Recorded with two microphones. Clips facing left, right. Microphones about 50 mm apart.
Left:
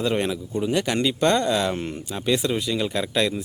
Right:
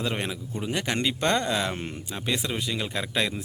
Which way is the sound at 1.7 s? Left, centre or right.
Centre.